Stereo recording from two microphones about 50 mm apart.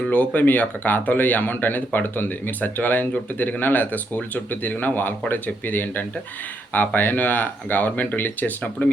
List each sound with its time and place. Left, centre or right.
0.1 s speech: left